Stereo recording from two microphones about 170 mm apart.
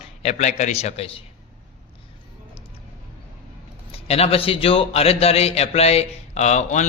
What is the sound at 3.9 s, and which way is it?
A man's voice, 35° left (ahead or behind).